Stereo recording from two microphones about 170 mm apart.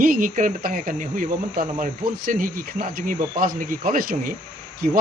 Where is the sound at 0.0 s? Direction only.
55° right (ahead or behind).